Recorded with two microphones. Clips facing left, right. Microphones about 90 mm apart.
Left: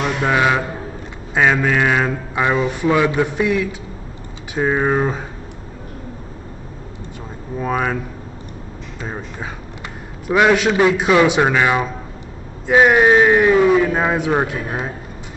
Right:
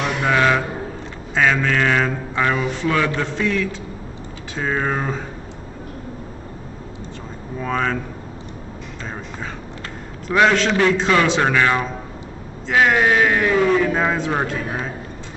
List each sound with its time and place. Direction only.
0.0 s speech: 10° left (ahead or behind)
7.5 s speech: 10° left (ahead or behind)
9.0 s speech: 15° left (ahead or behind)